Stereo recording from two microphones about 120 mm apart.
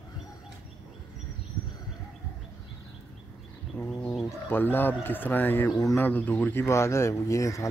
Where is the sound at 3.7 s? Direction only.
5° left (ahead or behind).